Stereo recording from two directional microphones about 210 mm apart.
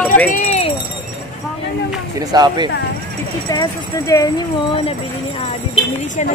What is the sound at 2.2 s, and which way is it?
Speech, 20° right (ahead or behind).